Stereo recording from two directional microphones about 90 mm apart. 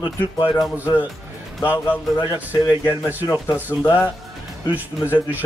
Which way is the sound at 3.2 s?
30° left (ahead or behind).